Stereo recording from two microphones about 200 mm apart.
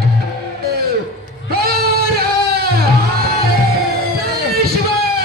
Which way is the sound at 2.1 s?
50° right (ahead or behind).